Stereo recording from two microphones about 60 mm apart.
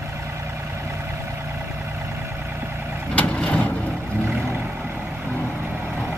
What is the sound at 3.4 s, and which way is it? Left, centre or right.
Vehicle, left.